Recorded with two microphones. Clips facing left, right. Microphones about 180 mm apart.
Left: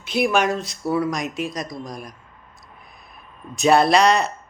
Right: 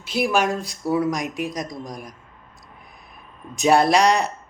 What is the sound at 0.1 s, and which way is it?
A man's voice, 5° right (ahead or behind).